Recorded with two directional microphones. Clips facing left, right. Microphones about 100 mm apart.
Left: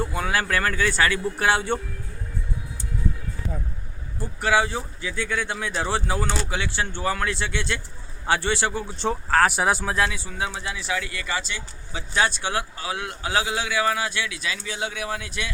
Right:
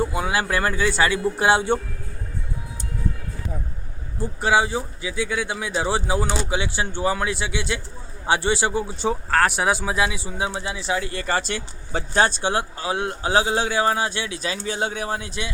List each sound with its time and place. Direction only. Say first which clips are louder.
0.0 s speech: right 2 dB; 15° right (ahead or behind)
4.2 s speech: right 2 dB; 20° right (ahead or behind)
9.0 s speech: left 1 dB; centre (ahead or behind); by 15.4 s 25° right (ahead or behind)